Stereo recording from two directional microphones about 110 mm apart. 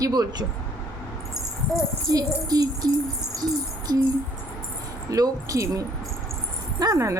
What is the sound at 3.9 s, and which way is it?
Speech, 40° right (ahead or behind).